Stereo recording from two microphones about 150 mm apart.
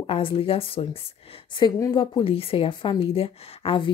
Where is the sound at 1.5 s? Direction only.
25° left (ahead or behind).